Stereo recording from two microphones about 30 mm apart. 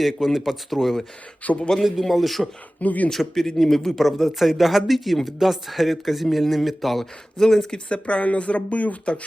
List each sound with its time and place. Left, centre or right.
0.0 s speech: centre
1.4 s speech: left
2.1 s speech: centre
2.8 s speech: left
3.2 s speech: centre
3.9 s speech: centre
7.0 s speech: centre
7.9 s speech: left